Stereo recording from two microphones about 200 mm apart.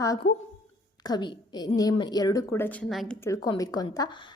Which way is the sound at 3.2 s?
15° left (ahead or behind).